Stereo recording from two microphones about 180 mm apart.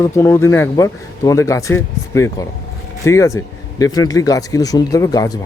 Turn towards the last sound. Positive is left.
turn(degrees=20)  # may be behind; listen again after turning